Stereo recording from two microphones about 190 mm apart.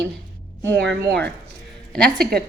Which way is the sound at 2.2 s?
55° right (ahead or behind).